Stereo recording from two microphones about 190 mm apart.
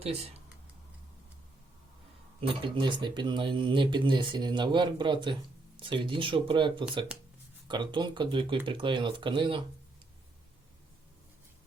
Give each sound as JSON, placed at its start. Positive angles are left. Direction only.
{"t": 2.4, "sound": "speech", "side_deg": -30}